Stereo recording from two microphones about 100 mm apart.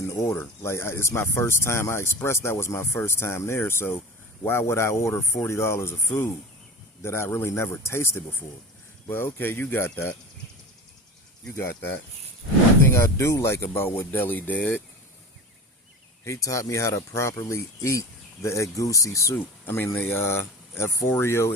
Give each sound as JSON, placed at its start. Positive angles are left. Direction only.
{"t": 0.1, "sound": "speech", "side_deg": 30}
{"t": 11.4, "sound": "speech", "side_deg": 25}
{"t": 16.2, "sound": "speech", "side_deg": 30}